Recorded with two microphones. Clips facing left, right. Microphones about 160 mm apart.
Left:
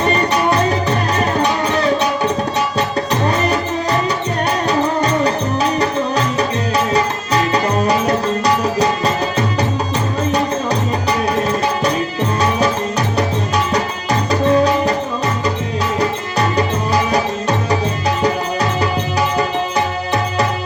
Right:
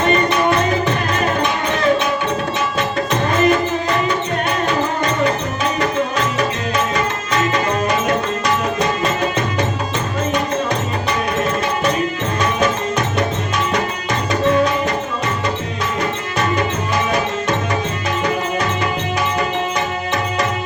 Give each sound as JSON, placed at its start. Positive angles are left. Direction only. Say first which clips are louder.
{"t": 3.1, "sound": "music", "louder": "right 4 dB", "side_deg": 35}
{"t": 4.9, "sound": "music", "louder": "left 2 dB", "side_deg": 35}
{"t": 6.7, "sound": "music", "louder": "left 4 dB", "side_deg": 35}
{"t": 13.7, "sound": "music", "louder": "left 2 dB", "side_deg": 35}
{"t": 16.0, "sound": "music", "louder": "left 2 dB", "side_deg": 35}